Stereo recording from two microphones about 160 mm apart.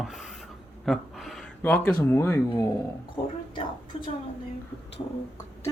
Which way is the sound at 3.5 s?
35° left (ahead or behind).